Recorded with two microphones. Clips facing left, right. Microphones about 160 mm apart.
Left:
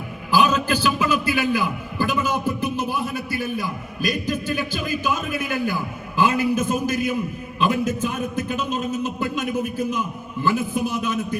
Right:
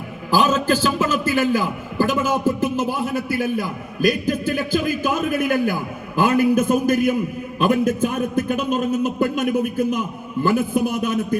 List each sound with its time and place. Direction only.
0.3 s a man's voice: 40° right (ahead or behind)